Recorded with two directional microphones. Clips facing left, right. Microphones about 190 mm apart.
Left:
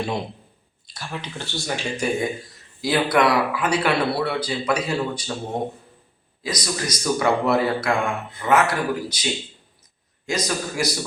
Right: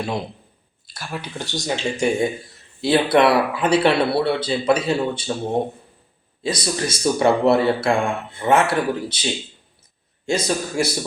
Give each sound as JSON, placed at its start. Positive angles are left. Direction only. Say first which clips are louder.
{"t": 0.0, "sound": "speech", "louder": "right 1 dB", "side_deg": 0}
{"t": 1.6, "sound": "speech", "louder": "right 4 dB", "side_deg": -25}
{"t": 6.4, "sound": "speech", "louder": "right 4 dB", "side_deg": -30}
{"t": 10.2, "sound": "speech", "louder": "right 3 dB", "side_deg": -30}